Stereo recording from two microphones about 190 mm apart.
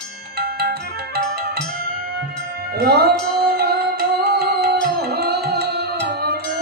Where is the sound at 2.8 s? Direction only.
55° right (ahead or behind).